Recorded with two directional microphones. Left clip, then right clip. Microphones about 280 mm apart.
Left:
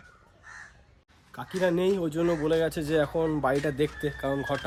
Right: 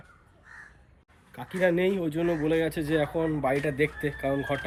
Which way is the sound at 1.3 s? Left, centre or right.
Centre.